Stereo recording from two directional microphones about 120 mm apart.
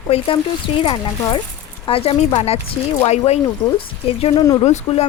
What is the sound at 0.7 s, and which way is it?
Speech, 50° left (ahead or behind).